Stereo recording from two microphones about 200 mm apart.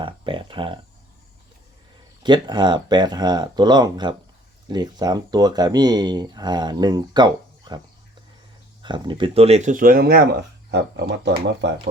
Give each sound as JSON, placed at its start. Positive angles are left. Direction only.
{"t": 0.0, "sound": "a sound", "side_deg": -25}
{"t": 2.2, "sound": "speech", "side_deg": -25}
{"t": 8.8, "sound": "speech", "side_deg": -25}